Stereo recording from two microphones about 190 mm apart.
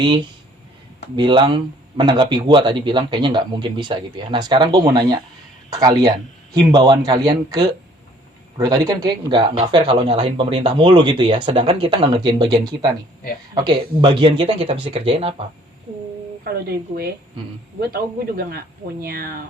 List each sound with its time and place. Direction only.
1.1 s speech: 25° right (ahead or behind)
16.4 s speech: 55° right (ahead or behind)